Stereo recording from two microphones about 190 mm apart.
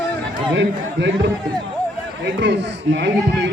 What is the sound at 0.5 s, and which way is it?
A man's voice, 65° right (ahead or behind).